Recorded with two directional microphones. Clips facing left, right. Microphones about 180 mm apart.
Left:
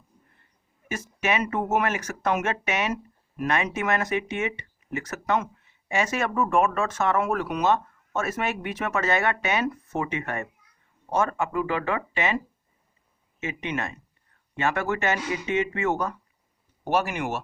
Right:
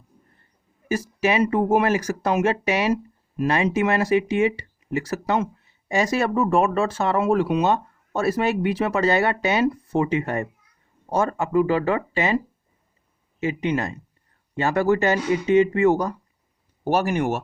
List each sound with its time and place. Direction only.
0.9 s speech: 35° right (ahead or behind)
13.4 s speech: 35° right (ahead or behind)